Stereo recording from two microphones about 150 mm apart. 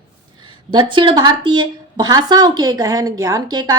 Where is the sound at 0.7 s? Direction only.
30° right (ahead or behind).